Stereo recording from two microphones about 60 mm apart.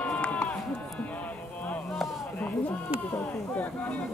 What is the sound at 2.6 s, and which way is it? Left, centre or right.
Speech, left.